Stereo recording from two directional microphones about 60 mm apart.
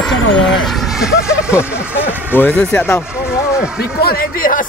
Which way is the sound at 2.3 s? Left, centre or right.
Left.